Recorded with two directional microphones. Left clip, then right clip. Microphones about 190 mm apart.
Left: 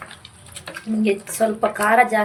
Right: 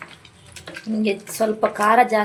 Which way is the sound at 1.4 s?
20° right (ahead or behind).